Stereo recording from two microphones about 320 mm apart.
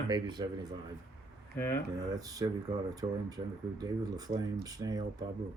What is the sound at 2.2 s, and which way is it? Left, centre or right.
Speech, centre.